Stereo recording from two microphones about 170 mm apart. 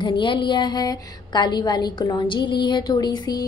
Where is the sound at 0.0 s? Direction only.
30° left (ahead or behind).